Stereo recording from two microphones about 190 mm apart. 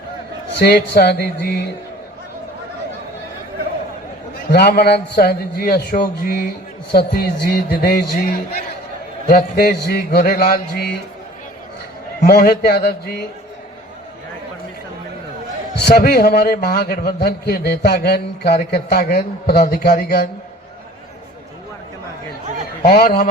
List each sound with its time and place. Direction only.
0.6 s a man's voice: 55° left (ahead or behind)
4.4 s a man's voice: 60° left (ahead or behind)
6.9 s mantra: 55° left (ahead or behind)
12.2 s a man's voice: 50° left (ahead or behind)
16.0 s a man's voice: 50° left (ahead or behind)
18.7 s mantra: 50° left (ahead or behind)
22.8 s mantra: 50° left (ahead or behind)